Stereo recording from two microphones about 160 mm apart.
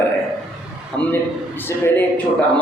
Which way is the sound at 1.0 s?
10° left (ahead or behind).